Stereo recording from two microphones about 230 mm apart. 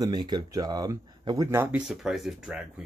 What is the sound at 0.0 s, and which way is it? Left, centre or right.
Speech, centre.